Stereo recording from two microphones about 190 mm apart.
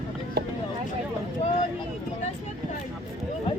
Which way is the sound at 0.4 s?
55° right (ahead or behind).